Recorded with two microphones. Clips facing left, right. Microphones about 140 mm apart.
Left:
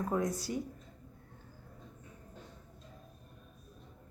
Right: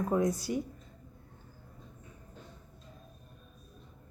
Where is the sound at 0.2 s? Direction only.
15° right (ahead or behind).